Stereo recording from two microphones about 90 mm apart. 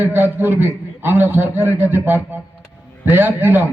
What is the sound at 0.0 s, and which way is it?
A man's voice, 25° right (ahead or behind).